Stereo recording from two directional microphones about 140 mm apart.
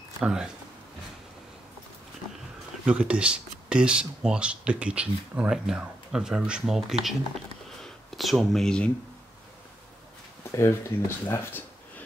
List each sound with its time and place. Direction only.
0.2 s speech: 5° right (ahead or behind)
2.8 s speech: 10° right (ahead or behind)
10.5 s speech: 20° left (ahead or behind)